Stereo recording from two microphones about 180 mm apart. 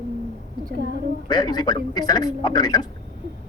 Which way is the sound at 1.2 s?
25° left (ahead or behind).